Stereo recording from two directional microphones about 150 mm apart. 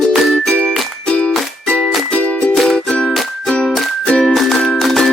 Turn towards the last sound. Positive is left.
turn(degrees=0)  # may be behind; listen again after turning